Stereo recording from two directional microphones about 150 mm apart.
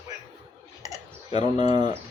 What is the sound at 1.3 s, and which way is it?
Speech, 45° left (ahead or behind).